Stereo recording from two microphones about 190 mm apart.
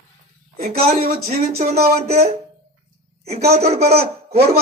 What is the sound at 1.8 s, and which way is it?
Speech, 50° right (ahead or behind).